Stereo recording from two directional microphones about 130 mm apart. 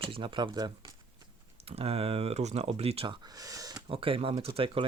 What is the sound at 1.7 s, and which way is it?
Speech, 50° right (ahead or behind).